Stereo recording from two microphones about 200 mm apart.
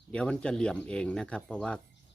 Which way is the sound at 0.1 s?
5° left (ahead or behind).